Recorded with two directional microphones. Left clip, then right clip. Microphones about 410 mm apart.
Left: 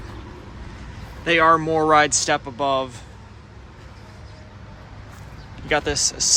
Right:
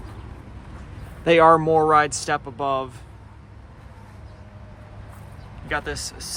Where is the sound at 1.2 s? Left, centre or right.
Centre.